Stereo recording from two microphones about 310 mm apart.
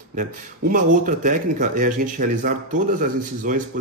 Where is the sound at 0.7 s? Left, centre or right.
Right.